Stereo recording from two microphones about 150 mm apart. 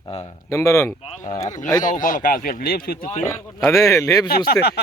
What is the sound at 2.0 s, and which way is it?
Speech, 60° left (ahead or behind).